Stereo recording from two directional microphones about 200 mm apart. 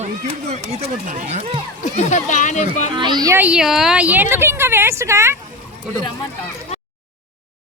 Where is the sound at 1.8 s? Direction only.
35° left (ahead or behind).